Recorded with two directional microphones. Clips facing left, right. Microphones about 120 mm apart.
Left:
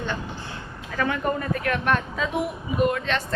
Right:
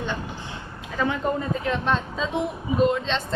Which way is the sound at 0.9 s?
20° right (ahead or behind).